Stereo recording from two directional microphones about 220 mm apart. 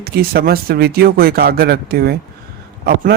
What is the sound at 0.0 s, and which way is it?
Speech, 45° right (ahead or behind).